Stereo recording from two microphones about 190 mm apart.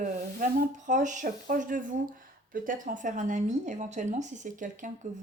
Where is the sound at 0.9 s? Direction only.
40° right (ahead or behind).